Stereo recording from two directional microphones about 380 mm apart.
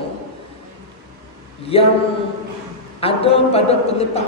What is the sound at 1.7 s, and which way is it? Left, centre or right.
Speech, centre.